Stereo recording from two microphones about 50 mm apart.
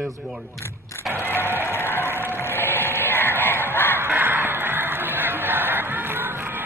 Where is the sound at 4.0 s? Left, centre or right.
Right.